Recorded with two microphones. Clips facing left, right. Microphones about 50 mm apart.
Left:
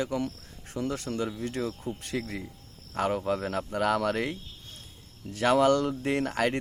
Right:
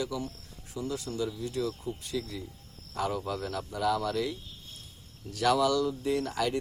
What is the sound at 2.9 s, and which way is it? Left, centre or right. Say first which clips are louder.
Speech: left 4 dB; left.